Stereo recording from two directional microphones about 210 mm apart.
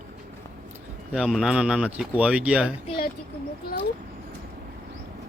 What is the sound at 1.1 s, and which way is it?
Speech, centre (ahead or behind).